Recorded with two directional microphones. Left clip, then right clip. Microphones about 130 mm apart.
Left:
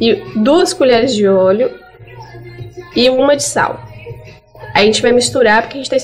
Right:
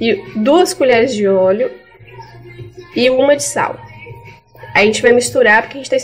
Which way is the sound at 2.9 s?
10° right (ahead or behind).